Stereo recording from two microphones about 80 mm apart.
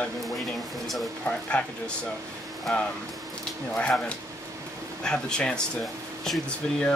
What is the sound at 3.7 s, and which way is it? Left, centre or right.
Speech, centre.